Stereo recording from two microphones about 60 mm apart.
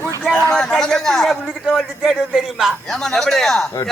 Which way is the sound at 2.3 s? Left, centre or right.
Centre.